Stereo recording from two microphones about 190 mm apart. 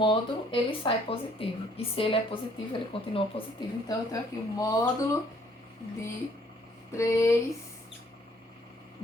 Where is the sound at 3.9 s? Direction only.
20° left (ahead or behind).